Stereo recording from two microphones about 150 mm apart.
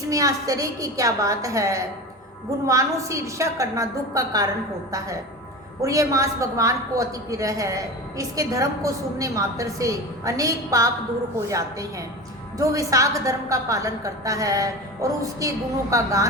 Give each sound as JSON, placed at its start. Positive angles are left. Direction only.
{"t": 0.1, "sound": "a woman's voice", "side_deg": -20}